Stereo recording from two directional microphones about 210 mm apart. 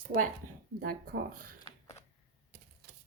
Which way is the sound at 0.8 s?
45° right (ahead or behind).